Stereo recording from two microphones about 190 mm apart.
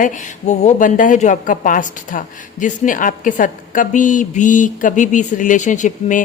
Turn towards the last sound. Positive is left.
turn(degrees=40)  # may be behind; listen again after turning